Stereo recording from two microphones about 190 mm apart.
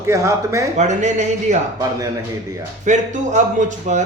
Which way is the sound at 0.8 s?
40° right (ahead or behind).